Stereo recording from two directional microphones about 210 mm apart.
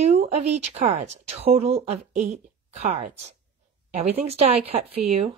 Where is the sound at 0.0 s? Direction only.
30° right (ahead or behind).